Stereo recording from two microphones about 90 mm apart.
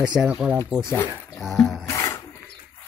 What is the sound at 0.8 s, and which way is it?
Speech, 25° left (ahead or behind).